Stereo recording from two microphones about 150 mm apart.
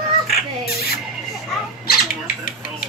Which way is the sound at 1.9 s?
85° left.